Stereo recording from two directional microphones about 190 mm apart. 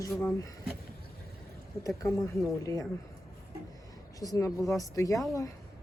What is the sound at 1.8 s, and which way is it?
Speech, 15° left (ahead or behind).